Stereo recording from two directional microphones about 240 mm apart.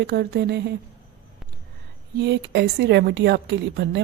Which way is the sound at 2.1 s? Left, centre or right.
Right.